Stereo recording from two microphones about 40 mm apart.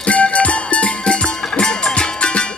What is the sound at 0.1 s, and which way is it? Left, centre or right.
Music, left.